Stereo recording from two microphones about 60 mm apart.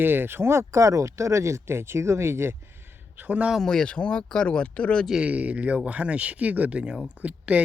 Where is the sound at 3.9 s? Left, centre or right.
Left.